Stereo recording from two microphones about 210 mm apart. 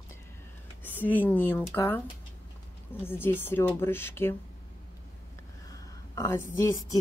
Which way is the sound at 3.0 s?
10° left (ahead or behind).